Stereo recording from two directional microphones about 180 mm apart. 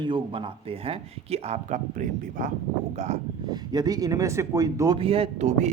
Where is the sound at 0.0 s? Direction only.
30° right (ahead or behind).